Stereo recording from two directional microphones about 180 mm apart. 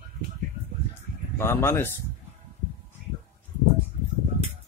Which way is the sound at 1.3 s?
15° left (ahead or behind).